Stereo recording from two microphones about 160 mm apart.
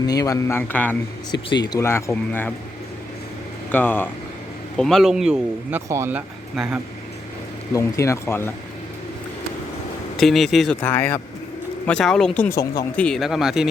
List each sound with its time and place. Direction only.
0.0 s a man's voice: 25° left (ahead or behind)
1.3 s speech: 25° left (ahead or behind)
1.8 s a man's voice: 15° left (ahead or behind)
3.7 s a man's voice: 10° left (ahead or behind)
4.8 s speech: centre (ahead or behind)
7.7 s a man's voice: 20° left (ahead or behind)
10.2 s speech: centre (ahead or behind)
10.8 s a man's voice: 15° left (ahead or behind)
13.0 s speech: 5° left (ahead or behind)